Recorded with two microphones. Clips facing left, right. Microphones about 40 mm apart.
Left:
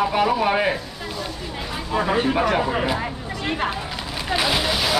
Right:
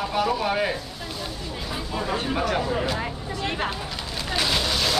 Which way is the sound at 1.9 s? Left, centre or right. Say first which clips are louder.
Left 7 dB; left.